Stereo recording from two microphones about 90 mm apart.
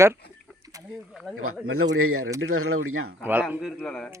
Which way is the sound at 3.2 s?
20° right (ahead or behind).